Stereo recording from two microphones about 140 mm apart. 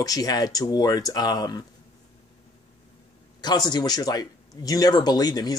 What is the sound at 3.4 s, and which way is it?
Speech, 30° left (ahead or behind).